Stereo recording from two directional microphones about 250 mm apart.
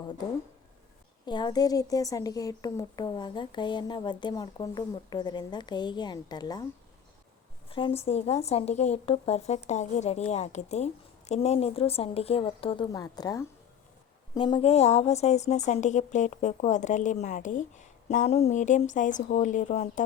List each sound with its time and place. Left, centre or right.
1.2 s speech: centre
7.7 s a woman's voice: left